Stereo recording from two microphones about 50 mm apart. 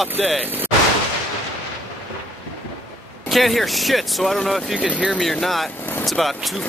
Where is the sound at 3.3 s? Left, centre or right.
Centre.